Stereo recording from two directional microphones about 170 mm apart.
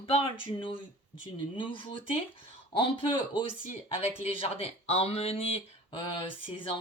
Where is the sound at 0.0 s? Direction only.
35° left (ahead or behind).